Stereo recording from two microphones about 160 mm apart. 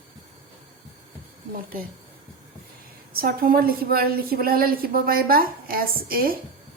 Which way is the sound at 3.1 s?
65° right (ahead or behind).